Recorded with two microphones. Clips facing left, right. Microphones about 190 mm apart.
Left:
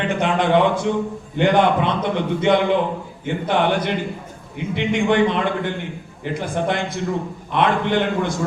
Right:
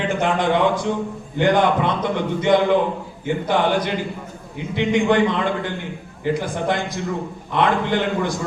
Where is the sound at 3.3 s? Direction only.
60° left (ahead or behind).